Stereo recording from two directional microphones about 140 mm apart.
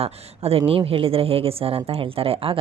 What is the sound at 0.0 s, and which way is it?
A woman's voice, 45° right (ahead or behind).